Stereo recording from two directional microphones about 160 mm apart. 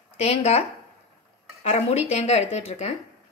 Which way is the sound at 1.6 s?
40° left (ahead or behind).